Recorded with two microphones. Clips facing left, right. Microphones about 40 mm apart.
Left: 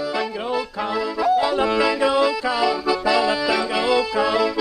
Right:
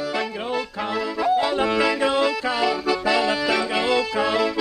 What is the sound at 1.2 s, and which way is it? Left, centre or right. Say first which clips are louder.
Accordion: left 2 dB; right.